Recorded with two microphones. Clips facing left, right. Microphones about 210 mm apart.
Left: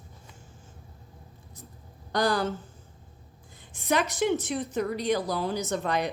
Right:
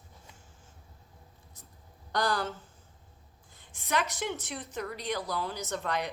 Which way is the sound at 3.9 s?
15° left (ahead or behind).